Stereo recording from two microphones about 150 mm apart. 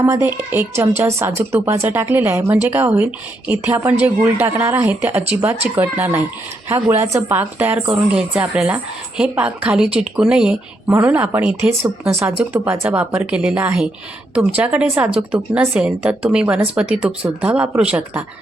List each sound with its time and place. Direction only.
0.0 s a woman's voice: 15° right (ahead or behind)